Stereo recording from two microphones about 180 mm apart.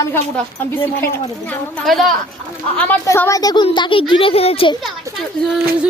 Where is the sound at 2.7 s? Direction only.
10° left (ahead or behind); by 4.8 s 30° left (ahead or behind).